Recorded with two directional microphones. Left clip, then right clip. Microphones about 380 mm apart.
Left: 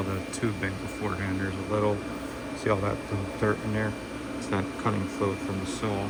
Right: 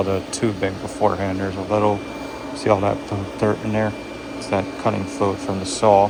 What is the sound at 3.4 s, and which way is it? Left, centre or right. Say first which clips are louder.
Speech: right 8 dB; right.